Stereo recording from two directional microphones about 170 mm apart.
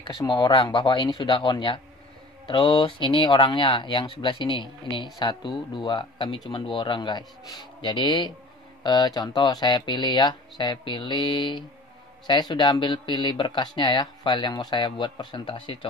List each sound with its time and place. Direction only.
0.2 s speech: 25° left (ahead or behind)